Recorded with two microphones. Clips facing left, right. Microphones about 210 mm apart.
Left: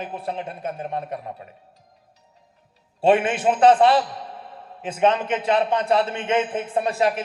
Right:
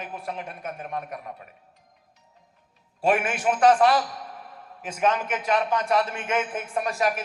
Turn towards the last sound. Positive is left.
turn(degrees=30)  # may be behind; listen again after turning